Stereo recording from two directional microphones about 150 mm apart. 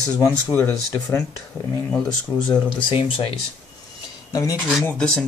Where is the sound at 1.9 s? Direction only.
5° left (ahead or behind).